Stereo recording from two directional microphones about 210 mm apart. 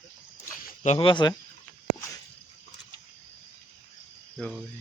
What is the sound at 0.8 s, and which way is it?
Speech, 25° left (ahead or behind).